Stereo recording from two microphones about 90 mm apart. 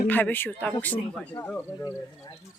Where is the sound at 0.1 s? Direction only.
20° left (ahead or behind).